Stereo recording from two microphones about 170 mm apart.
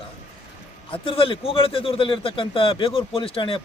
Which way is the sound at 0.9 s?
30° left (ahead or behind).